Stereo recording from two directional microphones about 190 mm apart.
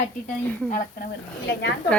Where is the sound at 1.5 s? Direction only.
65° left (ahead or behind).